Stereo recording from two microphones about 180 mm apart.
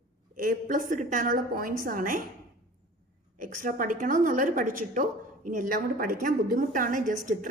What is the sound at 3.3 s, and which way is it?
A woman's voice, 50° right (ahead or behind).